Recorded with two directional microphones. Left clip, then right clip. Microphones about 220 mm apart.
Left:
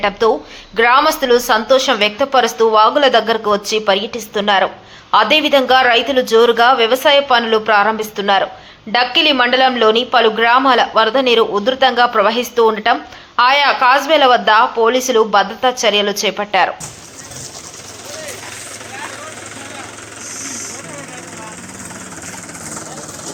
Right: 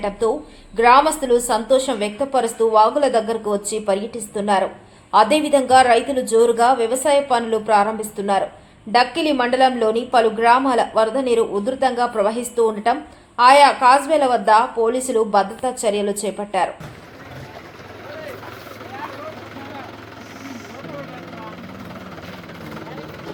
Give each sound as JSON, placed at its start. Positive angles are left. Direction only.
{"t": 1.0, "sound": "speech", "side_deg": 5}